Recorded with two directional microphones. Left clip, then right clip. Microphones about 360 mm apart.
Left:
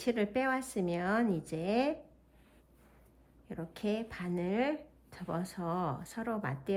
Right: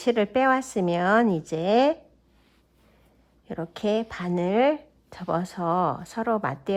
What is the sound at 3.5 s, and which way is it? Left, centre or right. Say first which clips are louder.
A woman's voice: right 11 dB; centre.